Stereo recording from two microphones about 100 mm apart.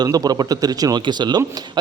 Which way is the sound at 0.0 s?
40° right (ahead or behind).